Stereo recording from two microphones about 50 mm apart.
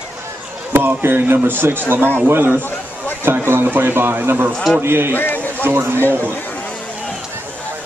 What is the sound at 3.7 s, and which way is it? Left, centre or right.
A man's voice, right.